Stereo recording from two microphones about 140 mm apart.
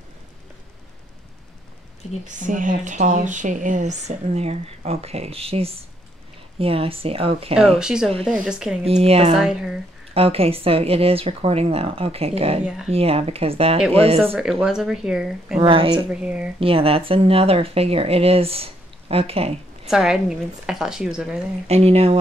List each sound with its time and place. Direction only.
2.2 s speech: 65° right (ahead or behind); by 7.5 s 45° right (ahead or behind)
7.8 s a woman's voice: 5° right (ahead or behind)
8.8 s speech: 45° right (ahead or behind)
9.3 s a woman's voice: 5° right (ahead or behind)
10.1 s speech: 45° right (ahead or behind)
12.6 s a woman's voice: 5° right (ahead or behind)
12.9 s speech: 45° right (ahead or behind)
14.3 s a woman's voice: centre (ahead or behind)
15.6 s a woman's voice: 40° right (ahead or behind)
16.1 s speech: 10° right (ahead or behind)
16.5 s speech: 40° right (ahead or behind)
19.9 s a woman's voice: 5° right (ahead or behind)
21.6 s speech: 50° right (ahead or behind)